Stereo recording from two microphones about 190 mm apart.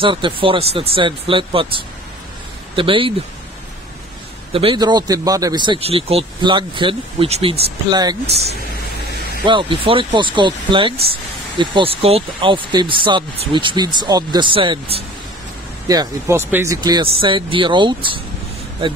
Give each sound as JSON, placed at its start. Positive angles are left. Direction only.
{"t": 0.0, "sound": "speech", "side_deg": -25}
{"t": 4.5, "sound": "speech", "side_deg": -30}
{"t": 7.9, "sound": "speech", "side_deg": -20}
{"t": 9.5, "sound": "speech", "side_deg": -25}
{"t": 15.9, "sound": "speech", "side_deg": -15}